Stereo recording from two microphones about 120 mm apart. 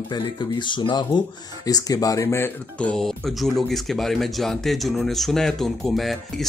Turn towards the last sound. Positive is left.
turn(degrees=0)  # may be behind; listen again after turning